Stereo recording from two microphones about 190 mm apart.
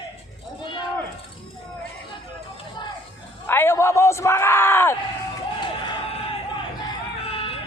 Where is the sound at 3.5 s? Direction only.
10° left (ahead or behind).